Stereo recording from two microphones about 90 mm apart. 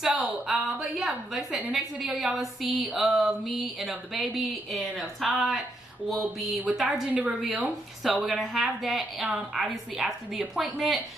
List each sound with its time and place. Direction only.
0.1 s a woman's voice: 5° right (ahead or behind)
4.7 s a woman's voice: 15° right (ahead or behind)